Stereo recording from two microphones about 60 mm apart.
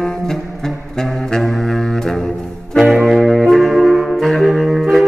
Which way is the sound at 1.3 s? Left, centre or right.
Centre.